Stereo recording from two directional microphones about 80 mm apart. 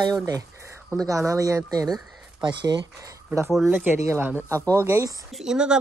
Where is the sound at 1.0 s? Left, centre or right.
Right.